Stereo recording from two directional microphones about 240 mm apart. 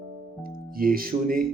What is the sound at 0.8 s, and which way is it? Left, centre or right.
Speech, right.